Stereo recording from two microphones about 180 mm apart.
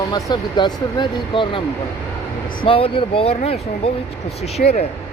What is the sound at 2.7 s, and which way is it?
Speech, 30° left (ahead or behind).